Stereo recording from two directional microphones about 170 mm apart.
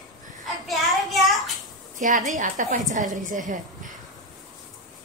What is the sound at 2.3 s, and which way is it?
A woman's voice, 45° right (ahead or behind).